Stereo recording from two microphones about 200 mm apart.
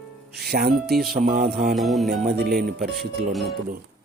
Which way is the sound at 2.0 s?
45° right (ahead or behind).